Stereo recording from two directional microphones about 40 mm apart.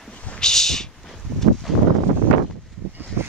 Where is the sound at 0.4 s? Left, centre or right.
Centre.